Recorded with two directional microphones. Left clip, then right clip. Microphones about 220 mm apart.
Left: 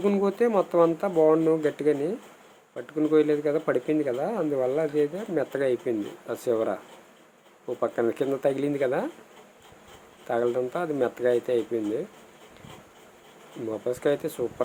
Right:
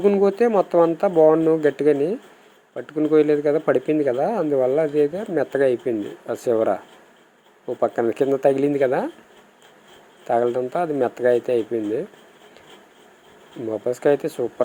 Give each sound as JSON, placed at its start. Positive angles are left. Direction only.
{"t": 0.0, "sound": "speech", "side_deg": -15}
{"t": 7.8, "sound": "speech", "side_deg": -15}
{"t": 10.2, "sound": "speech", "side_deg": -15}
{"t": 13.7, "sound": "speech", "side_deg": -15}